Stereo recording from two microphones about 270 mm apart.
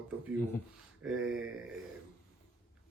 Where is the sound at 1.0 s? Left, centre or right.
Right.